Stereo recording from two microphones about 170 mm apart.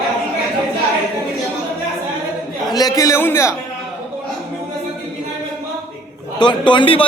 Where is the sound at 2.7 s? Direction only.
20° left (ahead or behind).